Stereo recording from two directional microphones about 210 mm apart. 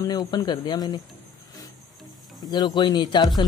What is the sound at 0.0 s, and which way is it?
Speech, 20° left (ahead or behind).